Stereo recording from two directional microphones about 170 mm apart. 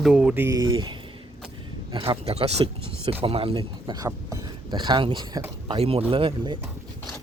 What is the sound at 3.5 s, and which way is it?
Speech, 25° right (ahead or behind).